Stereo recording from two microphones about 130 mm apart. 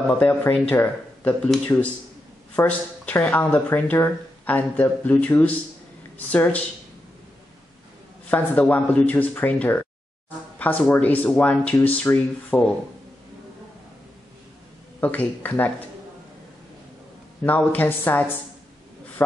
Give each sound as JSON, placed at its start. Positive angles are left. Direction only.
{"t": 0.2, "sound": "speech", "side_deg": 10}
{"t": 8.3, "sound": "speech", "side_deg": 10}
{"t": 15.0, "sound": "speech", "side_deg": 15}
{"t": 17.4, "sound": "speech", "side_deg": 10}